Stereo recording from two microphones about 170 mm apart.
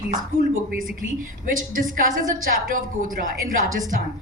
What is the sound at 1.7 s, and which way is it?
Speech, 50° right (ahead or behind).